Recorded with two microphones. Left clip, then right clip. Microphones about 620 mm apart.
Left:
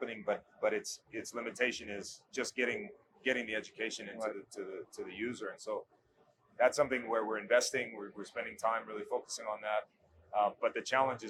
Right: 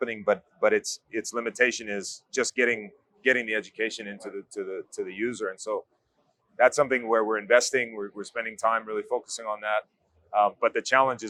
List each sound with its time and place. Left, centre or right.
0.0 s speech: right